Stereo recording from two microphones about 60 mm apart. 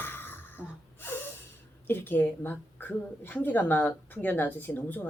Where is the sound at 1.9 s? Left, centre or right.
Left.